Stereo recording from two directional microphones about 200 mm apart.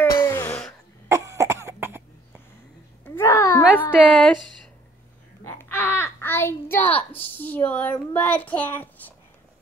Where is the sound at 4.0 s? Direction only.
5° left (ahead or behind).